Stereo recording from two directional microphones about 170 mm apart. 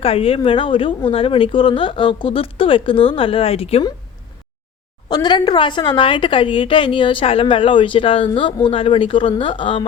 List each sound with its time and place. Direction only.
0.0 s a woman's voice: 35° left (ahead or behind)
5.0 s a woman's voice: 25° left (ahead or behind)